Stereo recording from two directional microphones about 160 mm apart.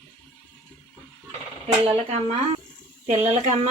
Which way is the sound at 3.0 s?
45° right (ahead or behind).